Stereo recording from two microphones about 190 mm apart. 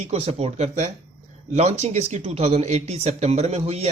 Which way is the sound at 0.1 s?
35° right (ahead or behind).